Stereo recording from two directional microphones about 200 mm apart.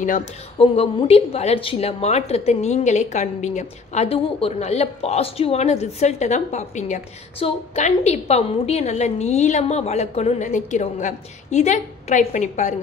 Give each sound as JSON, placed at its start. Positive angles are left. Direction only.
{"t": 0.0, "sound": "a woman's voice", "side_deg": 40}
{"t": 0.6, "sound": "a woman's voice", "side_deg": 30}